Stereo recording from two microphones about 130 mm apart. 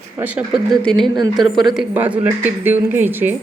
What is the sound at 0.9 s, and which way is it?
A woman's voice, centre (ahead or behind).